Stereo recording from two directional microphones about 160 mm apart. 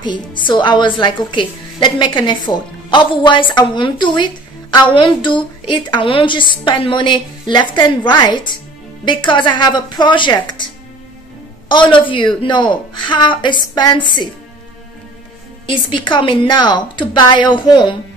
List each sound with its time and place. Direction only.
0.0 s a woman's voice: 30° left (ahead or behind)
11.7 s a woman's voice: 30° left (ahead or behind)
15.6 s a woman's voice: 30° left (ahead or behind)